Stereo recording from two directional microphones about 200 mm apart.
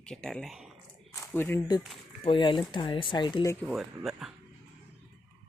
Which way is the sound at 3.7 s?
Centre (ahead or behind).